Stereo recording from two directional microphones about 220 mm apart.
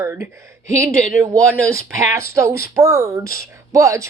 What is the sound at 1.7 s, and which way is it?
Speech, 15° right (ahead or behind).